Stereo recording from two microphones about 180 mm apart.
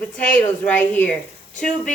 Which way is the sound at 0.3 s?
10° left (ahead or behind).